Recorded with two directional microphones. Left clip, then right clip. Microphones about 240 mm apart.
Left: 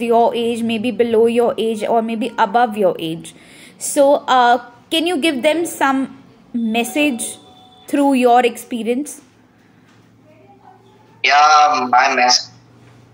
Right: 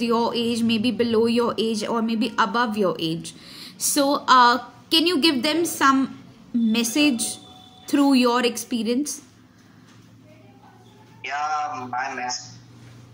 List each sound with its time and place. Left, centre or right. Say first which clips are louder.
0.0 s speech: left 8 dB; centre
11.2 s speech: left 15 dB; left